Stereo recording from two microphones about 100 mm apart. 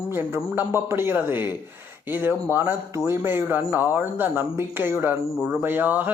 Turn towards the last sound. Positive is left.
turn(degrees=-20)  # may be behind; listen again after turning